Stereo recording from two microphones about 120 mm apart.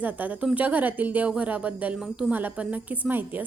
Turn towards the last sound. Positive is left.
turn(degrees=-15)  # may be behind; listen again after turning